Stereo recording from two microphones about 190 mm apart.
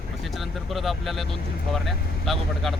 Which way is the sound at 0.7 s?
Centre (ahead or behind).